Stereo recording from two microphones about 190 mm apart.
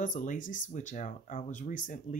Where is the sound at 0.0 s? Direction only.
45° left (ahead or behind).